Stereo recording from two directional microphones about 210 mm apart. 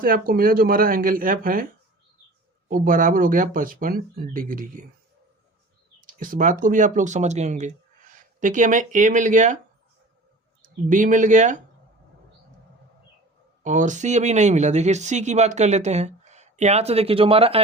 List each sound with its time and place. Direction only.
0.0 s speech: 45° right (ahead or behind)
2.6 s speech: 40° right (ahead or behind)
6.0 s speech: 40° right (ahead or behind)
10.6 s speech: 40° right (ahead or behind)
13.6 s speech: 35° right (ahead or behind)